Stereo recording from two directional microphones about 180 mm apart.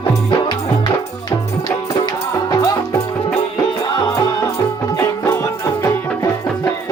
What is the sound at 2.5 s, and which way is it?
Music, 20° left (ahead or behind).